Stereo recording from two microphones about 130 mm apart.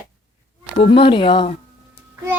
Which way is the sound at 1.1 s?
40° left (ahead or behind).